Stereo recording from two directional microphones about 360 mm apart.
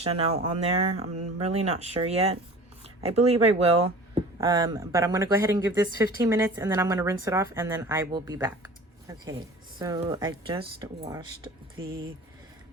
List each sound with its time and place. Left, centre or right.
0.0 s speech: centre